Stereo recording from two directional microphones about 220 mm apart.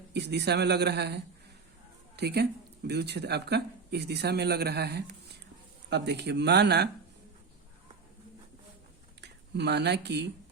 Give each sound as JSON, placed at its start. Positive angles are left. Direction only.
{"t": 0.1, "sound": "speech", "side_deg": -50}
{"t": 9.2, "sound": "speech", "side_deg": -50}